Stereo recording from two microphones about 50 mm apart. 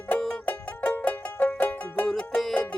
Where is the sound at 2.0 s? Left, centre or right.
Centre.